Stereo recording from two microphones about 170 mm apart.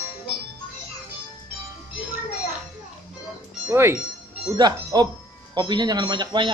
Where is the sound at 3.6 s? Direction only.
15° right (ahead or behind).